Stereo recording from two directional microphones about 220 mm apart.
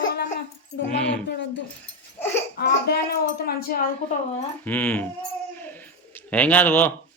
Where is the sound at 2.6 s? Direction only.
45° left (ahead or behind).